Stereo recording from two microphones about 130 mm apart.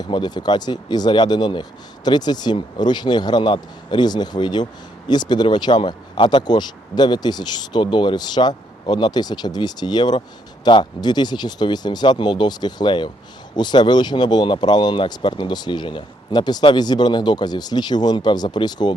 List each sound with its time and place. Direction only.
0.0 s speech: 35° left (ahead or behind)